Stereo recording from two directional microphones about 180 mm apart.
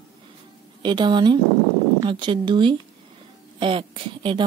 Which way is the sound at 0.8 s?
25° right (ahead or behind).